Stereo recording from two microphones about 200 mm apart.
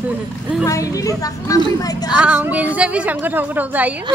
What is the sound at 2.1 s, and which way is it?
A woman's voice, 5° right (ahead or behind).